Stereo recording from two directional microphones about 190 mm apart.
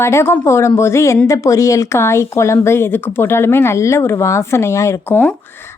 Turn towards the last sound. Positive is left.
turn(degrees=10)  # may be behind; listen again after turning